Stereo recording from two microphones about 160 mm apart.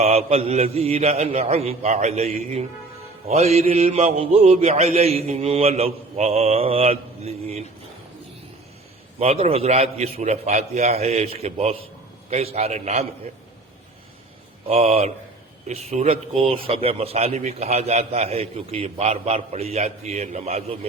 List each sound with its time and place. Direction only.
0.0 s a man's voice: 40° right (ahead or behind)
9.1 s a man's voice: 40° right (ahead or behind)
14.7 s a man's voice: 40° right (ahead or behind)